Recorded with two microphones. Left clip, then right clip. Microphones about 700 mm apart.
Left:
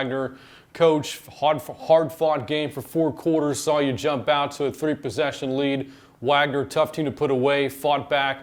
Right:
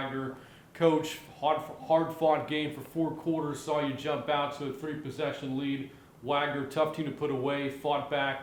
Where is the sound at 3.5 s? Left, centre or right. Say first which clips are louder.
Left 9 dB; left.